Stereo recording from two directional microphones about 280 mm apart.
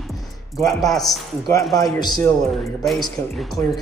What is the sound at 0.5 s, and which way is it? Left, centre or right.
Speech, centre.